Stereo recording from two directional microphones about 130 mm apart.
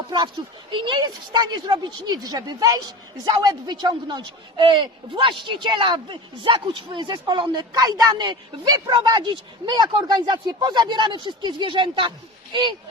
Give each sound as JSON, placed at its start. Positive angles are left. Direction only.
{"t": 0.7, "sound": "speech", "side_deg": -40}